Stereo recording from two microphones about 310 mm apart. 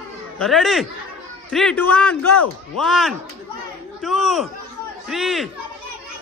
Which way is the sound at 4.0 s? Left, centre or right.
Centre.